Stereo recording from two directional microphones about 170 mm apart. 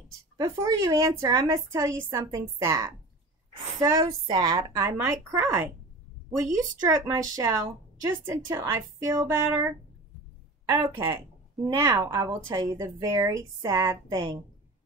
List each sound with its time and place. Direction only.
0.4 s a woman's voice: 20° right (ahead or behind)
11.7 s a woman's voice: 20° right (ahead or behind)